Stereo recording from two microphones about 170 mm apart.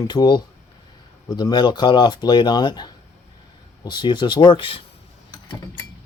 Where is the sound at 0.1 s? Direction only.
25° left (ahead or behind).